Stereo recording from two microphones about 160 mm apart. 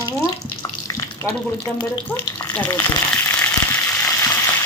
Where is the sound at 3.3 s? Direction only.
10° left (ahead or behind).